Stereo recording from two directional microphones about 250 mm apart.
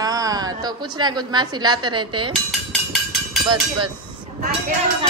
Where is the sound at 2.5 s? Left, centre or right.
Centre.